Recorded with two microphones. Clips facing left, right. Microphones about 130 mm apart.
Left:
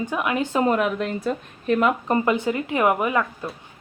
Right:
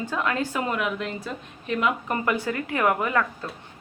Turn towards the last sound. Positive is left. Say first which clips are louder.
# left 2 dB
turn(degrees=15)  # may be behind; listen again after turning